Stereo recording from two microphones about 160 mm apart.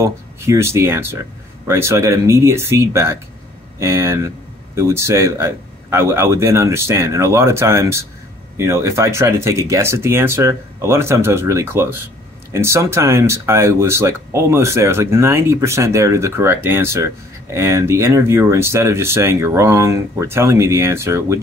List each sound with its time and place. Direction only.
0.0 s speech: 15° right (ahead or behind)